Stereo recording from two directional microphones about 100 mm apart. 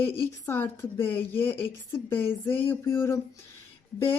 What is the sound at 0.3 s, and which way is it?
A woman's voice, 20° left (ahead or behind).